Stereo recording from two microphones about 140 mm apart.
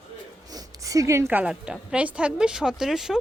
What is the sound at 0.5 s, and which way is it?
A woman's voice, 25° right (ahead or behind).